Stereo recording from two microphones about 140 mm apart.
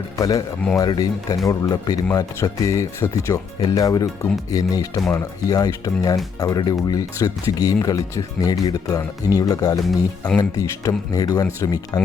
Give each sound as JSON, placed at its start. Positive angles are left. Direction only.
{"t": 0.2, "sound": "speech", "side_deg": 25}